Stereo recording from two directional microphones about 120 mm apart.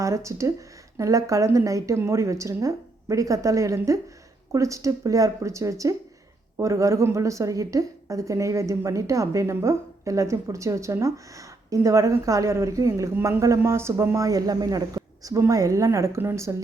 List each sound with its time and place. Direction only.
0.0 s a woman's voice: 25° right (ahead or behind)